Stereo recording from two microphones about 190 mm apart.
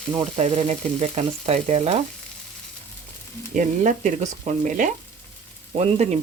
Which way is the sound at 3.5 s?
40° right (ahead or behind).